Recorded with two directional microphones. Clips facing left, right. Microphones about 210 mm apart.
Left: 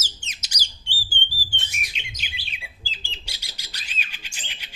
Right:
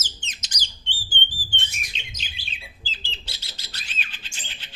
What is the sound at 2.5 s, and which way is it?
Bird, 15° left (ahead or behind).